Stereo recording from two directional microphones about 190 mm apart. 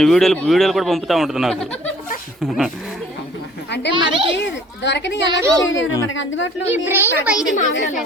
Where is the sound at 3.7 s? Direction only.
65° left (ahead or behind).